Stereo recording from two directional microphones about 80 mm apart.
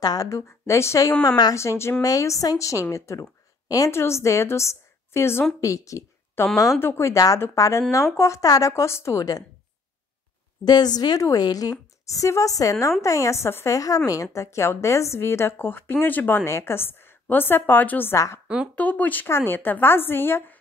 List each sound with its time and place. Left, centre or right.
0.0 s a woman's voice: left
1.2 s a woman's voice: left
1.5 s a woman's voice: left
3.9 s a woman's voice: left
10.6 s a woman's voice: left
13.7 s a woman's voice: left
18.1 s a woman's voice: left
18.8 s a woman's voice: centre